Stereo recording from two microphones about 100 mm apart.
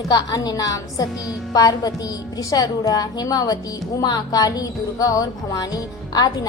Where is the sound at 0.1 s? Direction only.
40° left (ahead or behind).